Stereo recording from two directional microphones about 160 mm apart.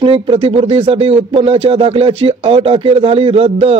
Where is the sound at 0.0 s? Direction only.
35° right (ahead or behind).